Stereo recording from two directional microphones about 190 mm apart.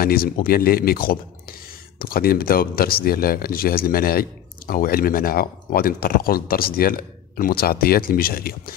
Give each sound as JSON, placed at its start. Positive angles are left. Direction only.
{"t": 0.0, "sound": "speech", "side_deg": 50}